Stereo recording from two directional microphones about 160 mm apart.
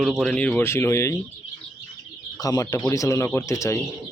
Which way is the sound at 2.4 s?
20° left (ahead or behind).